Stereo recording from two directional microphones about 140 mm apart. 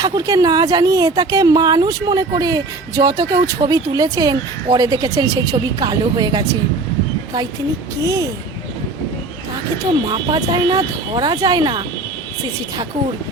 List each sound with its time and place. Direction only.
0.0 s a woman's voice: 25° right (ahead or behind)
8.0 s a woman's voice: 25° right (ahead or behind)
10.1 s a woman's voice: 30° right (ahead or behind)